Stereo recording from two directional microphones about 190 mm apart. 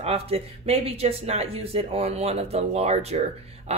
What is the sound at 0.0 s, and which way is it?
Speech, 30° right (ahead or behind).